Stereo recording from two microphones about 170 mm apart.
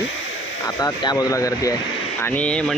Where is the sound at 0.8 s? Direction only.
20° left (ahead or behind).